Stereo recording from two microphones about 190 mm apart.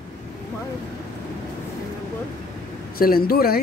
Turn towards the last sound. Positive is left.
turn(degrees=55)  # may be behind; listen again after turning